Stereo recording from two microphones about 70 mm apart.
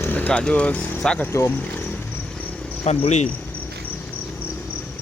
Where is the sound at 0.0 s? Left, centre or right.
Left.